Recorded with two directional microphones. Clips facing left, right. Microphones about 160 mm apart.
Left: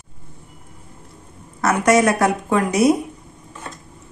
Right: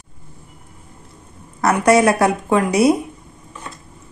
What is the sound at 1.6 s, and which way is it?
Speech, 35° right (ahead or behind).